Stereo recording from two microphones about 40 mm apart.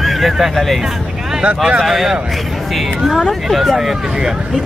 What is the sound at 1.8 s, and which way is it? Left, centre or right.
Speech, centre.